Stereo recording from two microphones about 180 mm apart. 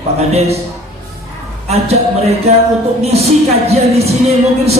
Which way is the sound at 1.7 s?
35° right (ahead or behind).